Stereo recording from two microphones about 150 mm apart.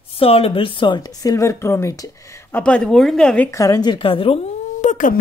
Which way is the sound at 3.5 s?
25° left (ahead or behind).